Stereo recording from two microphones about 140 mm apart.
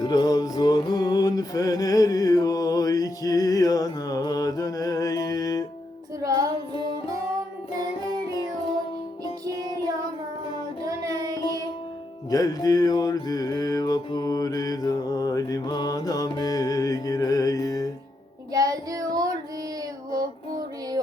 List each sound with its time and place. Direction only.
0.0 s music: 30° left (ahead or behind)
6.2 s music: 25° right (ahead or behind)
10.8 s music: 25° right (ahead or behind)
12.3 s mantra: 25° left (ahead or behind)
18.5 s child singing: 25° right (ahead or behind)